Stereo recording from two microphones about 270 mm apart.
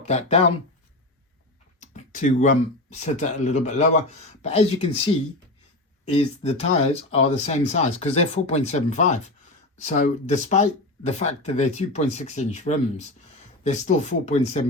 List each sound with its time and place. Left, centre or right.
0.0 s speech: left
1.8 s speech: left